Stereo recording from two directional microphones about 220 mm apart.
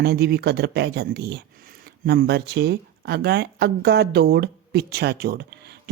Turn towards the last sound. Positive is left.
turn(degrees=-50)  # may be behind; listen again after turning